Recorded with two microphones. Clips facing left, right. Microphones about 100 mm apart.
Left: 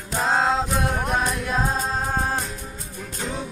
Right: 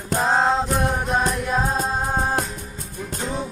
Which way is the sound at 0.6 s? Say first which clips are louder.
Right 2 dB; centre (ahead or behind).